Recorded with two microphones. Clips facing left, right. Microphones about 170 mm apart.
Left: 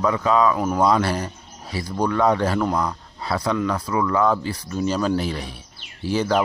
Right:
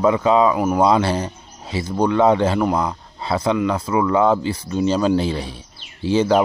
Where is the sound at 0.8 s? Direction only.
25° right (ahead or behind).